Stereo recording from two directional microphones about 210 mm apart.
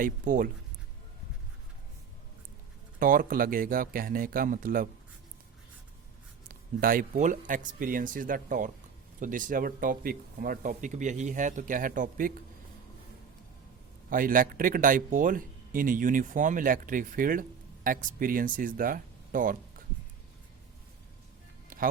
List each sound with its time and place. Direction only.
0.0 s speech: 40° right (ahead or behind)
3.0 s speech: 45° right (ahead or behind)
6.5 s speech: 40° right (ahead or behind)
14.1 s speech: 40° right (ahead or behind)